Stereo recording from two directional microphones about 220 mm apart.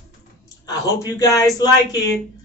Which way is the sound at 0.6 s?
15° left (ahead or behind).